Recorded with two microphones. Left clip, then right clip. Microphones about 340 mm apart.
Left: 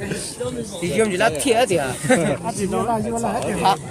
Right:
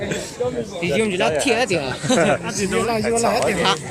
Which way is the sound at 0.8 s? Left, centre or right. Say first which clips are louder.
Left 1 dB; left.